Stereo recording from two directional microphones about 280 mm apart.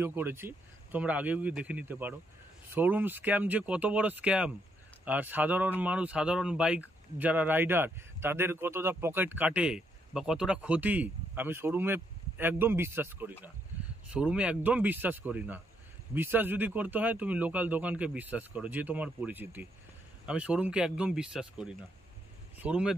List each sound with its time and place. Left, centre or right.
0.0 s speech: centre